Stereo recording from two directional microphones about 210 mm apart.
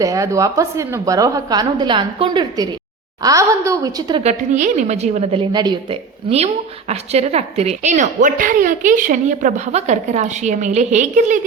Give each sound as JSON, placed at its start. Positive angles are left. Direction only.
{"t": 0.0, "sound": "a woman's voice", "side_deg": -15}
{"t": 4.2, "sound": "a woman's voice", "side_deg": -35}